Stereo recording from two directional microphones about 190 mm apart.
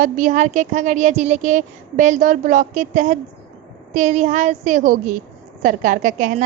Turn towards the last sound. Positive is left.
turn(degrees=-45)  # may be behind; listen again after turning